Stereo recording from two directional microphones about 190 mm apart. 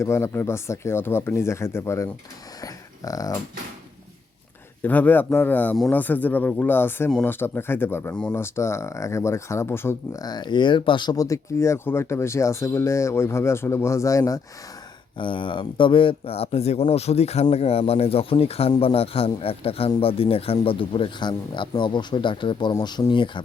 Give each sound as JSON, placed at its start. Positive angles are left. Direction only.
{"t": 0.0, "sound": "a man's voice", "side_deg": 15}
{"t": 2.6, "sound": "a sound", "side_deg": 20}
{"t": 4.8, "sound": "a man's voice", "side_deg": 10}